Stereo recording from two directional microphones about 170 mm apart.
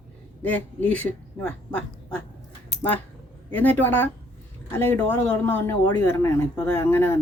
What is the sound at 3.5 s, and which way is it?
Speech, 10° left (ahead or behind).